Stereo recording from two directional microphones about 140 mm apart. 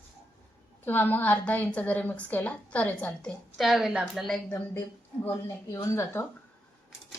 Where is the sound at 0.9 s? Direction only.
15° left (ahead or behind).